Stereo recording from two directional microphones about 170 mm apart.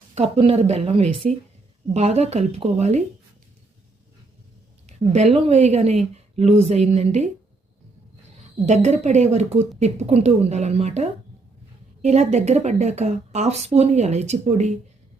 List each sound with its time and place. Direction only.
0.1 s a woman's voice: 35° right (ahead or behind)
5.1 s a woman's voice: 40° right (ahead or behind)
8.4 s a woman's voice: 45° right (ahead or behind)